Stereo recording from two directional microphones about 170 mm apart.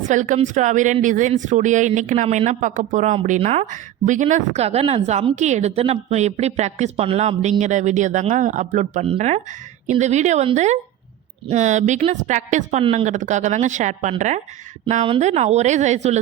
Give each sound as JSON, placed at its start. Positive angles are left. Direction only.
{"t": 0.1, "sound": "speech", "side_deg": -45}
{"t": 12.8, "sound": "speech", "side_deg": -30}
{"t": 13.1, "sound": "speech", "side_deg": -45}